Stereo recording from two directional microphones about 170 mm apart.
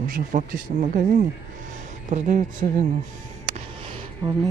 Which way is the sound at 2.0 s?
45° right (ahead or behind).